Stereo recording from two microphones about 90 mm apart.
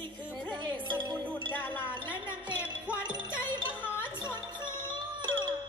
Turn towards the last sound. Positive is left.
turn(degrees=-55)  # may be behind; listen again after turning